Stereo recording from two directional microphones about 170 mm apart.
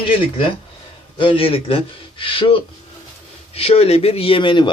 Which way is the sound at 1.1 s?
30° left (ahead or behind).